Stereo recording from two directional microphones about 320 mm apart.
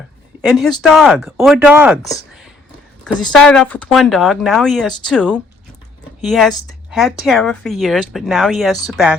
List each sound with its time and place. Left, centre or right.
0.4 s speech: centre
3.3 s speech: centre